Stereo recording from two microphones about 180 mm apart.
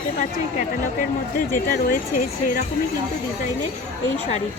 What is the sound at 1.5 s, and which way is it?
Speech, 50° left (ahead or behind).